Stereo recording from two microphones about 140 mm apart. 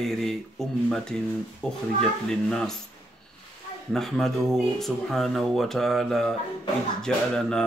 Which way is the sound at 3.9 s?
Centre (ahead or behind).